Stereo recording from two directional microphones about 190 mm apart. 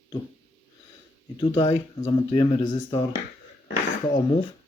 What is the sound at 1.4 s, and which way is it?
Speech, 30° left (ahead or behind).